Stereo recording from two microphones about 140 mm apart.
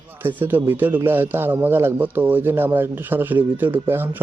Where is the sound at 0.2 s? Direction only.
15° right (ahead or behind).